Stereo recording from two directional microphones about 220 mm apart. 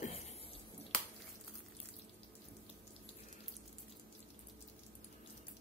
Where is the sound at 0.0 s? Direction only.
30° left (ahead or behind).